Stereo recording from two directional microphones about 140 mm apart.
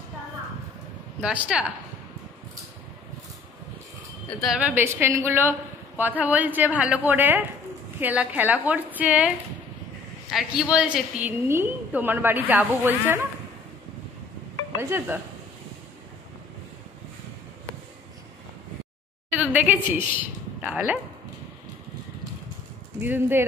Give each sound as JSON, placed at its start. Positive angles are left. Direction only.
{"t": 1.2, "sound": "a woman's voice", "side_deg": -5}
{"t": 4.4, "sound": "a woman's voice", "side_deg": -5}
{"t": 10.3, "sound": "a woman's voice", "side_deg": -5}
{"t": 14.8, "sound": "a woman's voice", "side_deg": -15}
{"t": 19.4, "sound": "a woman's voice", "side_deg": -10}
{"t": 22.9, "sound": "a woman's voice", "side_deg": -15}